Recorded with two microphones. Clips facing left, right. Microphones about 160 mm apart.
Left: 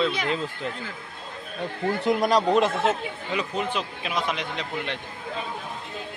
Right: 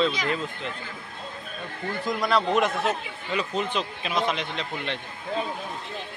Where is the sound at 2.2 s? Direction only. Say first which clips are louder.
Even; 40° left (ahead or behind).